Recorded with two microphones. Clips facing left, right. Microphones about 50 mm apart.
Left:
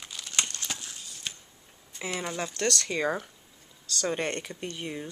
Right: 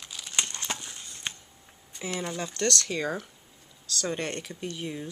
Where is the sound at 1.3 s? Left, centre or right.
Right.